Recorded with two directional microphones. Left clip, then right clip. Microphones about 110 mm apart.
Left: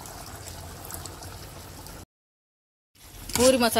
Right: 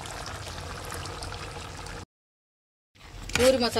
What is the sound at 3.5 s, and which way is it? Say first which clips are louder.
Speech: left 3 dB; 55° left (ahead or behind).